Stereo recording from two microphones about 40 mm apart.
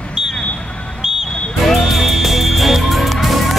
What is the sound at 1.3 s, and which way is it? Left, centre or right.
Music, left.